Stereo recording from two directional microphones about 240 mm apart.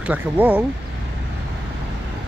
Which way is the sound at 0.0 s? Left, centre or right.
Centre.